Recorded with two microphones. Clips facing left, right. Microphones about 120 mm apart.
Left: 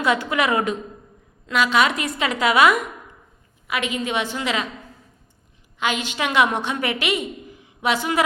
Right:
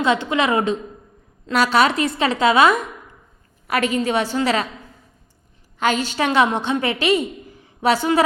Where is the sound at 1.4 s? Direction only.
35° right (ahead or behind).